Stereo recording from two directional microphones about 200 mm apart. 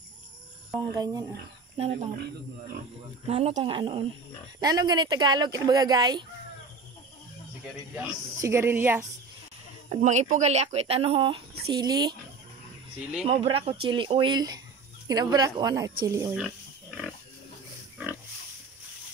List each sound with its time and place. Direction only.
0.7 s speech: 20° right (ahead or behind)
3.3 s speech: 30° right (ahead or behind)
7.9 s speech: 10° right (ahead or behind)
9.8 s speech: 35° right (ahead or behind); by 12.2 s 20° right (ahead or behind)
13.3 s speech: 30° right (ahead or behind)
16.3 s wild animals: centre (ahead or behind)